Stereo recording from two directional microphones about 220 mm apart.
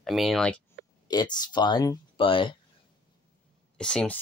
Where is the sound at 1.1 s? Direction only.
20° left (ahead or behind).